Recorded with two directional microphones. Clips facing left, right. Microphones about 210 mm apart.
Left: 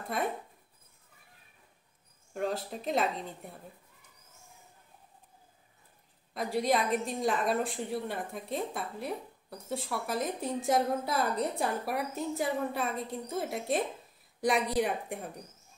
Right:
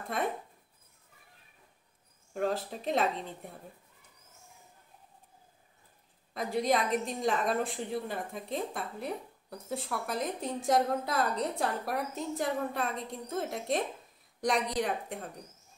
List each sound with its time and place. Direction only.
2.3 s a woman's voice: centre (ahead or behind)
6.3 s a woman's voice: centre (ahead or behind)